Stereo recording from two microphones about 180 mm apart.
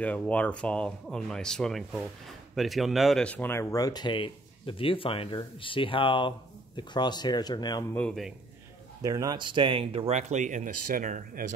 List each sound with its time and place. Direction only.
0.0 s speech: 5° left (ahead or behind)
7.9 s speech: 5° left (ahead or behind)
9.0 s speech: 20° right (ahead or behind); by 11.4 s 45° right (ahead or behind)